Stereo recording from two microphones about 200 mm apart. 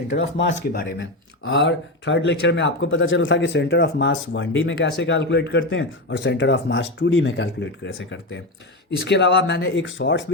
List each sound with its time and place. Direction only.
0.2 s speech: 65° left (ahead or behind)
0.7 s speech: 50° left (ahead or behind)
1.5 s speech: 65° left (ahead or behind)
9.0 s speech: 60° left (ahead or behind)